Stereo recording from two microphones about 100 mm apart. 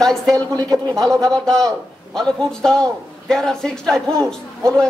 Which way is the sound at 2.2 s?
5° left (ahead or behind).